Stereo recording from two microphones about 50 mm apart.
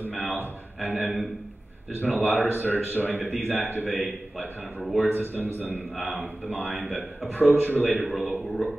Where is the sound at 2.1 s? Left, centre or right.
Right.